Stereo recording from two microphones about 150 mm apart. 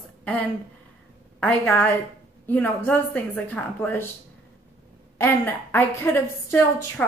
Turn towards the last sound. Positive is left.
turn(degrees=15)  # may be behind; listen again after turning